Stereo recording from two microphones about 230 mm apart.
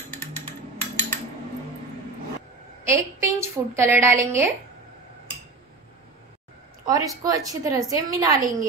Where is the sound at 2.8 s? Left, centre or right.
Centre.